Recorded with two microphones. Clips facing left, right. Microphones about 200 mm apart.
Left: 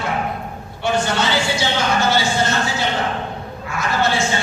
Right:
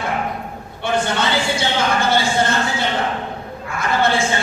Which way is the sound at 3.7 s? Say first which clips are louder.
Right 2 dB; 55° right (ahead or behind).